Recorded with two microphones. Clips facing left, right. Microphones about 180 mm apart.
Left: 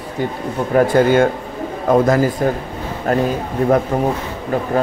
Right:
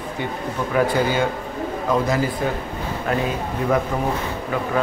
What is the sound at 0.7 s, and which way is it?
Speech, 55° left (ahead or behind).